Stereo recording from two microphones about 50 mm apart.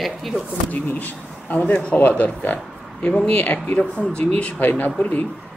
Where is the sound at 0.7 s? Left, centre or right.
Left.